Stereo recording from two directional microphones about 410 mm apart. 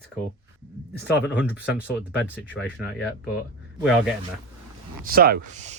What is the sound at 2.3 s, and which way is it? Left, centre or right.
Speech, centre.